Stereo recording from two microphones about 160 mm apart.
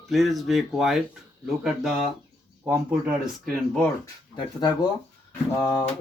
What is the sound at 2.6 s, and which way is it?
Speech, 10° right (ahead or behind).